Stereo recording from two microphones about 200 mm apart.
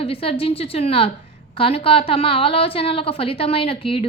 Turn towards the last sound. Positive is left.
turn(degrees=25)  # may be behind; listen again after turning